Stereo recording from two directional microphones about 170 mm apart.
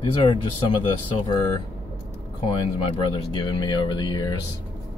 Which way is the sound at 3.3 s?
25° left (ahead or behind).